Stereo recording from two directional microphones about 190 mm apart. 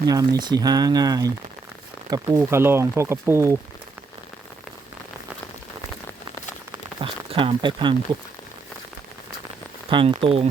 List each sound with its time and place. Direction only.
0.0 s speech: 20° right (ahead or behind)
7.0 s speech: 25° right (ahead or behind)
9.9 s speech: 25° right (ahead or behind)